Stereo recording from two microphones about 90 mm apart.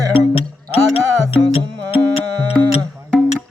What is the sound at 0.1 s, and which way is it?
Music, 90° left.